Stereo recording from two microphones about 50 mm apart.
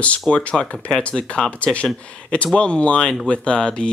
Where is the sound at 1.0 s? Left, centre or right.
Left.